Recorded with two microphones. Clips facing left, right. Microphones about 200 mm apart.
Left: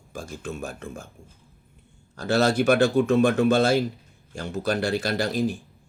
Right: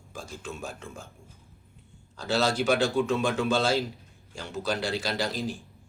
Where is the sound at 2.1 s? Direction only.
55° left (ahead or behind).